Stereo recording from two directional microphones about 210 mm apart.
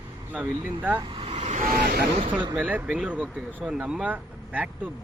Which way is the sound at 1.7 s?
50° right (ahead or behind).